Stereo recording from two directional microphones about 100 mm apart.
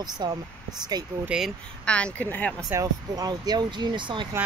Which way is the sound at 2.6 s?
35° right (ahead or behind).